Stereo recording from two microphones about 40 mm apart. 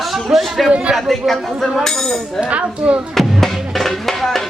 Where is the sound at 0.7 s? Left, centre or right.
Right.